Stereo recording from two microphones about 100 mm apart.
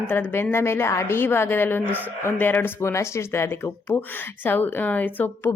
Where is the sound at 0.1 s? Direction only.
20° left (ahead or behind).